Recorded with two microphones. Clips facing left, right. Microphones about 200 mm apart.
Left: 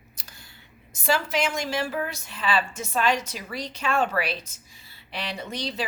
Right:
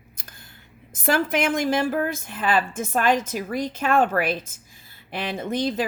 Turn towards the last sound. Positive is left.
turn(degrees=-50)  # may be behind; listen again after turning